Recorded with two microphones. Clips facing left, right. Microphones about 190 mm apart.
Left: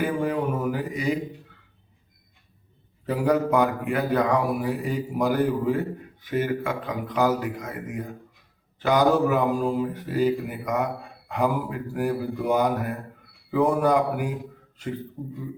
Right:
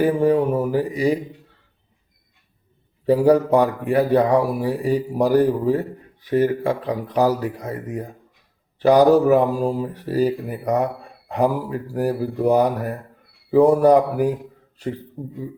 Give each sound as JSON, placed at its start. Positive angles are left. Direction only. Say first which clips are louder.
{"t": 0.0, "sound": "speech", "louder": "right 8 dB", "side_deg": -35}
{"t": 3.1, "sound": "speech", "louder": "right 7 dB", "side_deg": -35}